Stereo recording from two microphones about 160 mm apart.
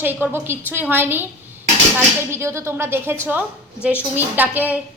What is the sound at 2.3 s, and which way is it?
A woman's voice, 15° right (ahead or behind).